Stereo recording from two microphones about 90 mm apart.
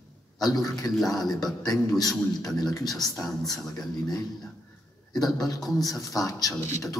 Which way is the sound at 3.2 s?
40° left (ahead or behind).